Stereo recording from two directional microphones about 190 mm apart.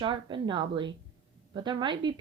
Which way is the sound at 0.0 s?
25° right (ahead or behind).